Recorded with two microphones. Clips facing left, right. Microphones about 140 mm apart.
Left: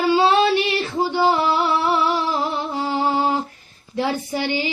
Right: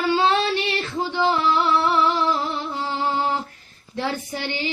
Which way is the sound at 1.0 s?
10° left (ahead or behind).